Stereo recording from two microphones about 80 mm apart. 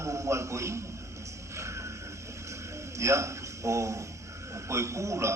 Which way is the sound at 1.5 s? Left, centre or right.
Right.